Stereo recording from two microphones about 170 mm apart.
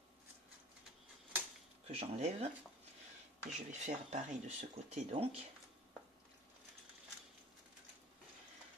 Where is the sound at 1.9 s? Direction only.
35° right (ahead or behind).